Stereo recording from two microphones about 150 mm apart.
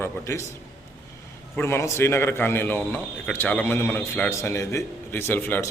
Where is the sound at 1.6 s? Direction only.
15° left (ahead or behind).